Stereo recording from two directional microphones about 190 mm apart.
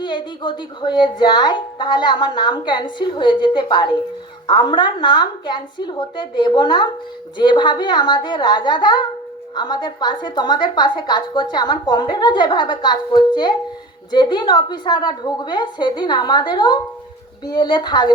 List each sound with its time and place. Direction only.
0.0 s a woman's voice: 25° left (ahead or behind)